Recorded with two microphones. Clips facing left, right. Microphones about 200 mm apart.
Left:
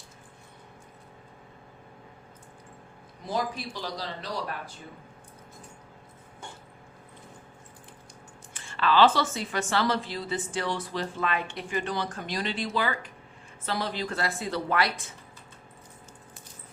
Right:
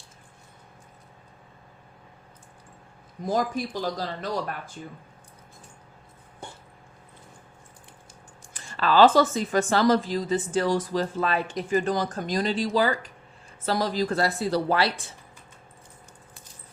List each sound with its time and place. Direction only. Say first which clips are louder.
3.2 s speech: right 5 dB; 45° right (ahead or behind)
8.5 s speech: right 3 dB; 40° right (ahead or behind)